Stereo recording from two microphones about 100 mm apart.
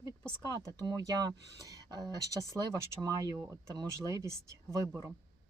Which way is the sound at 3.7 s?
40° right (ahead or behind).